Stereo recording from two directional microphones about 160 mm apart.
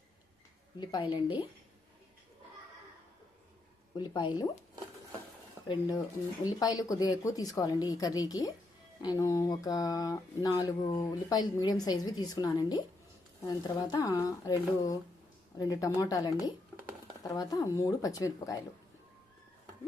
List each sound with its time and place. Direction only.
0.8 s speech: 30° left (ahead or behind)
3.9 s speech: 25° left (ahead or behind)
6.4 s speech: 25° left (ahead or behind)